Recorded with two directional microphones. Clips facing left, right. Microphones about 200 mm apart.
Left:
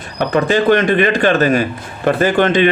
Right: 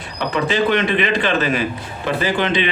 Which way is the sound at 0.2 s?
50° left (ahead or behind).